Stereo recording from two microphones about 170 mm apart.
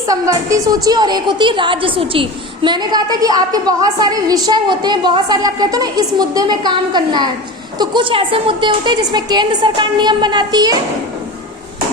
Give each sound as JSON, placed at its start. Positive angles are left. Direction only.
{"t": 0.1, "sound": "a woman's voice", "side_deg": -20}